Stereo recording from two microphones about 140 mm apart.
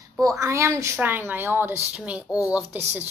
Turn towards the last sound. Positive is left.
turn(degrees=-15)  # may be behind; listen again after turning